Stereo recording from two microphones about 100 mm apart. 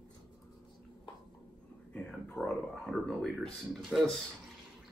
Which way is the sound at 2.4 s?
25° left (ahead or behind).